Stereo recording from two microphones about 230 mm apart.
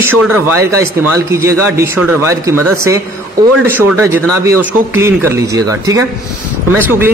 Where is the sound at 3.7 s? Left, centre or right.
Centre.